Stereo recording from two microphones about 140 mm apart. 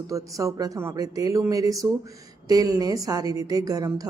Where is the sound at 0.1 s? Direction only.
25° right (ahead or behind).